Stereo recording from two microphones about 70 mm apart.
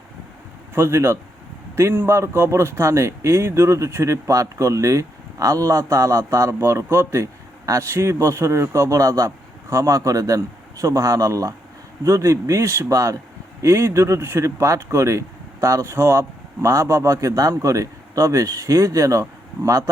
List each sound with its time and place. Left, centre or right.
0.7 s a man's voice: right